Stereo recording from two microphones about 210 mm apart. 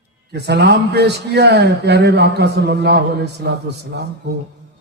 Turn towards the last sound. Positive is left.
turn(degrees=-50)  # may be behind; listen again after turning